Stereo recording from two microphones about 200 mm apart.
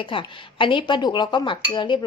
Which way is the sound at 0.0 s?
25° left (ahead or behind).